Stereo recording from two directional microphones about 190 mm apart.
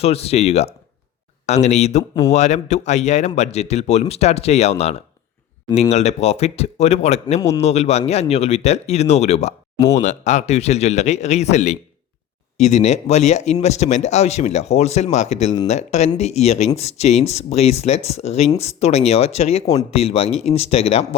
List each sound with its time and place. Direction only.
0.0 s speech: 30° left (ahead or behind)